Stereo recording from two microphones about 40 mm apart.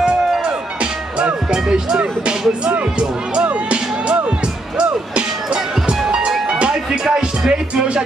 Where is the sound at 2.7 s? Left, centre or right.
Right.